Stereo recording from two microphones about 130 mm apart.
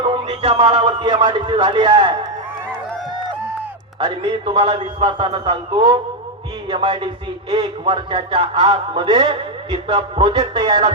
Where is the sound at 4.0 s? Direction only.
35° right (ahead or behind).